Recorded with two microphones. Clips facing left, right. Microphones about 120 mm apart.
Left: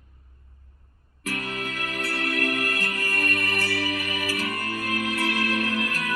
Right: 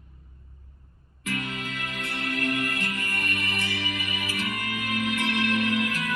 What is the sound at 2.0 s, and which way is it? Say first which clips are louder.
Music: left 3 dB; 40° left (ahead or behind).